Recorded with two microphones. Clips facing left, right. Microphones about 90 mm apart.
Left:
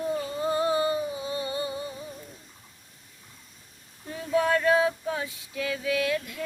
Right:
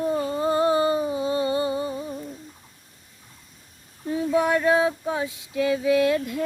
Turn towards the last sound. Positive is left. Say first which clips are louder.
# right 7 dB
turn(degrees=-25)  # may be behind; listen again after turning